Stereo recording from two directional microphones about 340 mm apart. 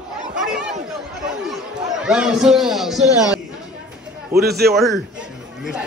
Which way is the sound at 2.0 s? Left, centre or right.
Centre.